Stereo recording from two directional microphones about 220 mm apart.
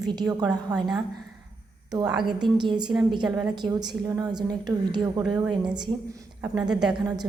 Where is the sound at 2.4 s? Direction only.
20° right (ahead or behind).